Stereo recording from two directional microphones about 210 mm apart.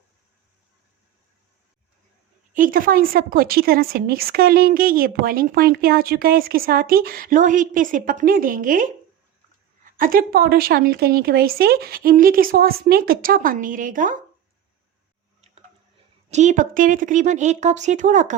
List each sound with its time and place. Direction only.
2.5 s a woman's voice: 40° right (ahead or behind)
16.3 s a woman's voice: 35° right (ahead or behind)